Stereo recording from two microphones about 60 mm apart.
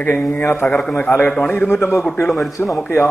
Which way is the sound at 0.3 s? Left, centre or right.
Left.